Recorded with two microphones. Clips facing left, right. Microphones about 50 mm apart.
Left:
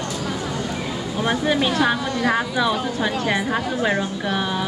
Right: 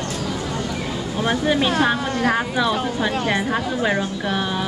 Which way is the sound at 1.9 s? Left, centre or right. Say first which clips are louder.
Right 1 dB; right.